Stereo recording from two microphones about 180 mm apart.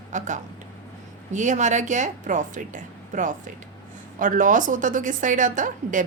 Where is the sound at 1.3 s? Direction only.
40° right (ahead or behind).